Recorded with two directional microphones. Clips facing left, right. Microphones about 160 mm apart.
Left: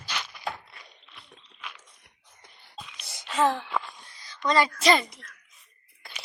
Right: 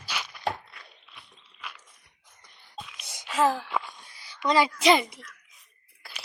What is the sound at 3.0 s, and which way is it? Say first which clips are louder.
Whispering: even; 15° right (ahead or behind).